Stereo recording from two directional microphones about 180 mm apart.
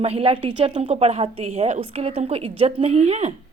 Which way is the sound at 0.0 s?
35° right (ahead or behind).